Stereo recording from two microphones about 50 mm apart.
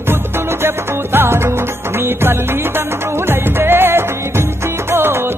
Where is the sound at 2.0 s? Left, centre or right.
Right.